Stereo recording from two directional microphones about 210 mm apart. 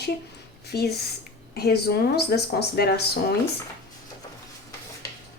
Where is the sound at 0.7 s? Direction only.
50° left (ahead or behind).